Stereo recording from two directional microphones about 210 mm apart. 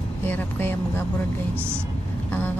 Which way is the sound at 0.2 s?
10° left (ahead or behind).